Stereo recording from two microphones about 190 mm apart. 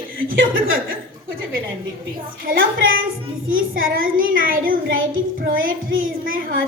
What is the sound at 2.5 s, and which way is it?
A woman's voice, 90° right.